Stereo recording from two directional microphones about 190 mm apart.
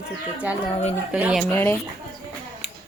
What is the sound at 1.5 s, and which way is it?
Speech, 10° left (ahead or behind).